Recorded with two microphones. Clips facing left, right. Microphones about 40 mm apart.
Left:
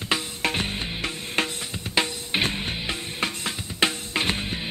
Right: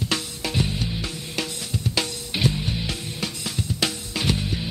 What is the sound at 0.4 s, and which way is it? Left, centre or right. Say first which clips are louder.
Music: even; left.